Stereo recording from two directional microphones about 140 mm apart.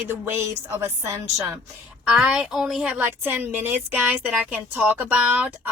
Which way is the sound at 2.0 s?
10° right (ahead or behind).